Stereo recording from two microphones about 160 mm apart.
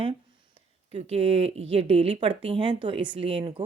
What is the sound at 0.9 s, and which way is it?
Speech, 40° right (ahead or behind).